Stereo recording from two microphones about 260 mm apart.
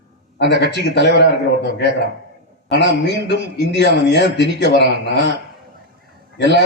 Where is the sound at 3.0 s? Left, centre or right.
Left.